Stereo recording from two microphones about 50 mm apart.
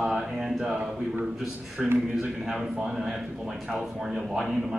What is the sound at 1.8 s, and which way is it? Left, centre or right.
Speech, centre.